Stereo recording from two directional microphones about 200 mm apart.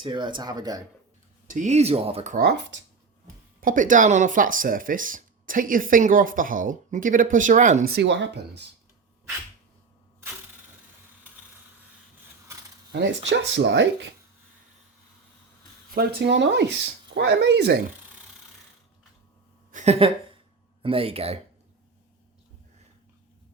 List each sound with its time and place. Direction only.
0.0 s speech: 25° right (ahead or behind)
1.5 s speech: 40° right (ahead or behind)
2.3 s speech: 50° right (ahead or behind)
7.9 s speech: 65° right (ahead or behind)
12.9 s speech: 60° right (ahead or behind)
16.0 s speech: 55° right (ahead or behind)
19.7 s a sound: 35° right (ahead or behind)
20.8 s speech: 30° right (ahead or behind)